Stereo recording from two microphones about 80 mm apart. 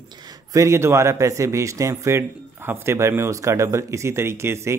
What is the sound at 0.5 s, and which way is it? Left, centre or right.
Speech, right.